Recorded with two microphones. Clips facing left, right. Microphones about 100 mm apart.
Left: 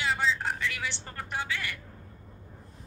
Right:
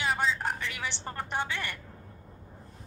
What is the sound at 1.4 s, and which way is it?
Speech, 55° right (ahead or behind).